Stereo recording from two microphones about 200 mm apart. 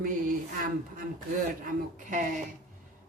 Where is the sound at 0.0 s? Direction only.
45° right (ahead or behind).